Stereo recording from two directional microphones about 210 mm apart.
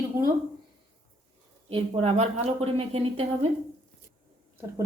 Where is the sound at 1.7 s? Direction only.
25° right (ahead or behind).